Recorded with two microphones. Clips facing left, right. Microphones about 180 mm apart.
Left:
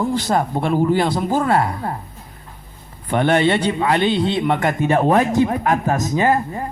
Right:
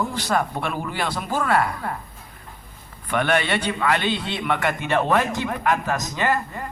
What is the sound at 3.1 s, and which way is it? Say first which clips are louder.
A man's voice: left 6 dB; 20° left (ahead or behind).